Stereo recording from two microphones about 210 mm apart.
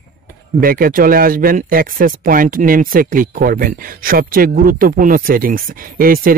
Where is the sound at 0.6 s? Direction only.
45° right (ahead or behind).